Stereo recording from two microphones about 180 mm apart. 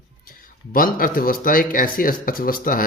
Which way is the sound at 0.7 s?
50° left (ahead or behind).